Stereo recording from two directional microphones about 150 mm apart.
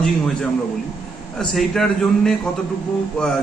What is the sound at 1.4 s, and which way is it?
Speech, 5° left (ahead or behind).